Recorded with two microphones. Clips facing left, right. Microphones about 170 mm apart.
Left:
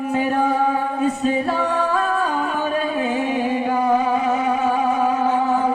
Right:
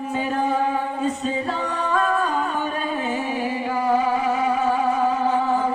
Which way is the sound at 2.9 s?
15° left (ahead or behind).